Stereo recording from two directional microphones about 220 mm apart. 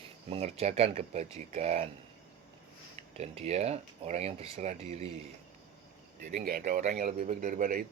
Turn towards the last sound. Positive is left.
turn(degrees=-40)  # may be behind; listen again after turning